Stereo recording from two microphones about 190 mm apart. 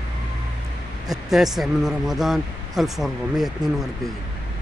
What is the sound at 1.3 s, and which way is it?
Speech, centre (ahead or behind).